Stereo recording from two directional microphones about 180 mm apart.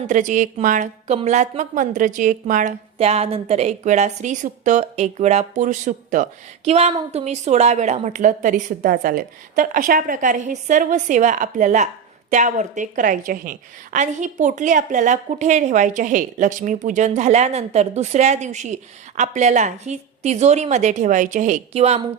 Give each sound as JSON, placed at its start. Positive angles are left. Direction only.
{"t": 0.1, "sound": "a woman's voice", "side_deg": -45}